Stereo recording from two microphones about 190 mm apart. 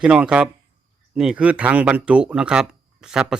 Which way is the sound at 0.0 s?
5° right (ahead or behind).